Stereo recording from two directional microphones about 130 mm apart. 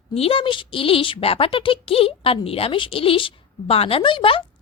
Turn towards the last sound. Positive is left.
turn(degrees=40)  # may be behind; listen again after turning